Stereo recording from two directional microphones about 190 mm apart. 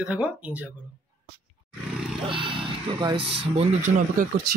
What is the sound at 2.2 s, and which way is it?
Speech, 25° right (ahead or behind).